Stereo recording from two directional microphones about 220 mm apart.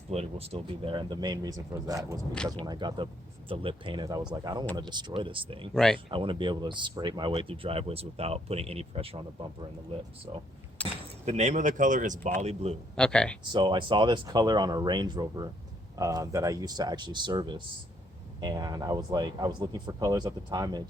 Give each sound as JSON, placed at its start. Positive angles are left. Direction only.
{"t": 0.1, "sound": "speech", "side_deg": -30}
{"t": 2.3, "sound": "speech", "side_deg": 5}
{"t": 2.6, "sound": "speech", "side_deg": -20}
{"t": 5.7, "sound": "speech", "side_deg": 5}
{"t": 6.1, "sound": "speech", "side_deg": -25}
{"t": 10.8, "sound": "speech", "side_deg": -30}
{"t": 13.0, "sound": "speech", "side_deg": 5}
{"t": 13.5, "sound": "speech", "side_deg": -20}